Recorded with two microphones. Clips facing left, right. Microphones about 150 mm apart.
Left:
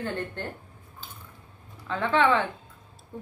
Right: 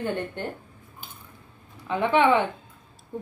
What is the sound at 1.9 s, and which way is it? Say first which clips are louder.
Speech: right 3 dB; 15° right (ahead or behind).